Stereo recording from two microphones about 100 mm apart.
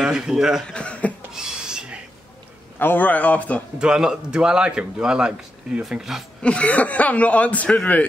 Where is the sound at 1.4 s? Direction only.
5° right (ahead or behind).